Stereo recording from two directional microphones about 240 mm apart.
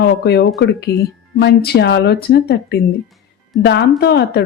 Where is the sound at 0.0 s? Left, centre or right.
Left.